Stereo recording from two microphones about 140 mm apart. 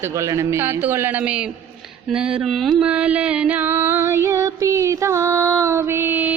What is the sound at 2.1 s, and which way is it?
Mantra, 5° right (ahead or behind).